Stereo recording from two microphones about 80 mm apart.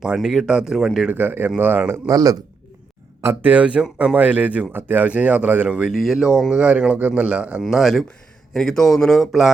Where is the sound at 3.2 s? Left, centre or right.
Right.